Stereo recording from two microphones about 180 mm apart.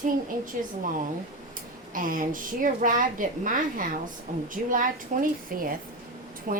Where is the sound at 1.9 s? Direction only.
50° right (ahead or behind).